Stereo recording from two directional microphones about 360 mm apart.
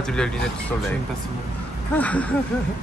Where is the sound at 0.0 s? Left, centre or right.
Centre.